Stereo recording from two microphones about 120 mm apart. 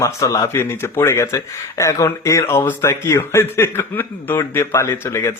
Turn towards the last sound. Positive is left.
turn(degrees=20)  # may be behind; listen again after turning